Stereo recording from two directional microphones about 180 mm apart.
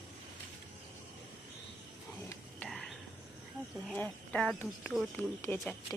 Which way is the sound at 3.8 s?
10° left (ahead or behind).